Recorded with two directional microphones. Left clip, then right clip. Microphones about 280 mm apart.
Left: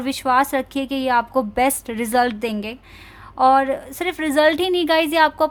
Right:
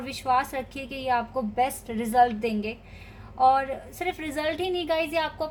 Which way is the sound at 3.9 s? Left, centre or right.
Left.